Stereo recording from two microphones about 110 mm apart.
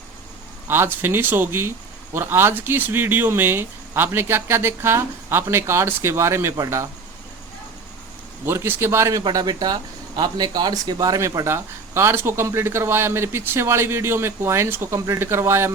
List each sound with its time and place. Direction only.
0.7 s speech: 20° right (ahead or behind)
8.4 s speech: 20° right (ahead or behind)
9.2 s speech: 40° right (ahead or behind); by 15.7 s 25° right (ahead or behind)